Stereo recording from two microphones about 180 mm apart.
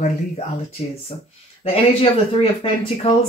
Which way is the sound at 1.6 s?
30° left (ahead or behind).